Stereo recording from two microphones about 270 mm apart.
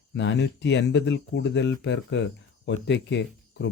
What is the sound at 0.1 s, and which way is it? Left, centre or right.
Speech, left.